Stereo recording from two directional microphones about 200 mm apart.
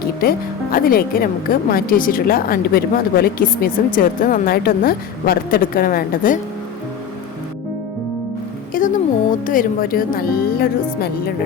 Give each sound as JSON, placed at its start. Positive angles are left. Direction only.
{"t": 0.2, "sound": "speech", "side_deg": 45}
{"t": 8.7, "sound": "a sound", "side_deg": 40}
{"t": 9.5, "sound": "speech", "side_deg": 45}